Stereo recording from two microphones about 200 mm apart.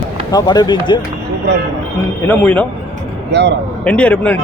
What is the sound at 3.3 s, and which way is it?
Speech, 60° right (ahead or behind).